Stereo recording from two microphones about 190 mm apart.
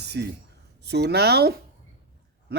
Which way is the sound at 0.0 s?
60° right (ahead or behind).